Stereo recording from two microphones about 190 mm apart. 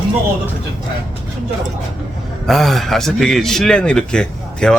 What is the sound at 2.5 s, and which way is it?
Speech, centre (ahead or behind).